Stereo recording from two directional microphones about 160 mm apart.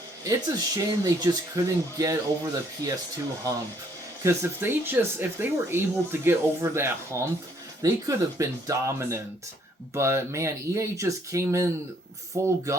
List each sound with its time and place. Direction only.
0.3 s speech: 20° right (ahead or behind)
4.2 s speech: 15° right (ahead or behind)